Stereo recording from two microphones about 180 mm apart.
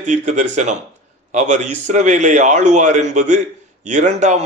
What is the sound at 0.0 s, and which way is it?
A man's voice, 40° right (ahead or behind).